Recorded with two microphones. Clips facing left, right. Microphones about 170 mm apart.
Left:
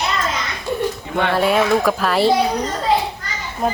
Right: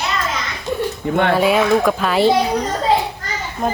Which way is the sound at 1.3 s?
Centre (ahead or behind).